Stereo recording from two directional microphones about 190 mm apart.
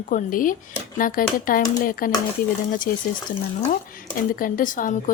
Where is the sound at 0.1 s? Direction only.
45° left (ahead or behind).